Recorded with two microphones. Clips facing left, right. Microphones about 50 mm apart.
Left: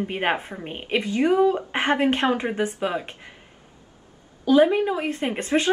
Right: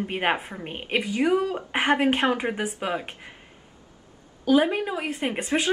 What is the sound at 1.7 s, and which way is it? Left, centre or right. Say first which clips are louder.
A woman's voice: even; centre.